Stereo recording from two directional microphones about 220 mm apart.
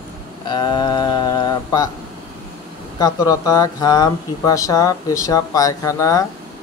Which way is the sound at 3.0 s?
15° left (ahead or behind).